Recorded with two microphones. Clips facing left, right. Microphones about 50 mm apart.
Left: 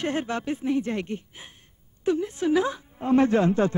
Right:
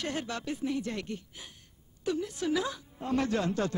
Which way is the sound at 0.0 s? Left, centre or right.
Left.